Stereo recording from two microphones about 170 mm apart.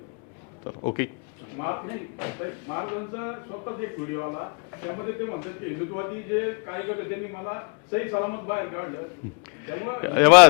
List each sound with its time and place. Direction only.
0.7 s speech: 35° left (ahead or behind)
1.5 s speech: 25° left (ahead or behind)